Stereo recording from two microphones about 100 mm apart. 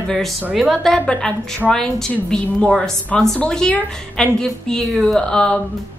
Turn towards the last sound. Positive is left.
turn(degrees=10)  # may be behind; listen again after turning